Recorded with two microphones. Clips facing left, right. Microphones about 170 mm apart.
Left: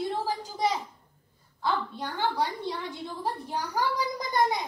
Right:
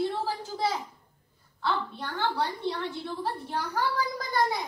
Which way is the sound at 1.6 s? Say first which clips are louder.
Left 1 dB; 15° left (ahead or behind).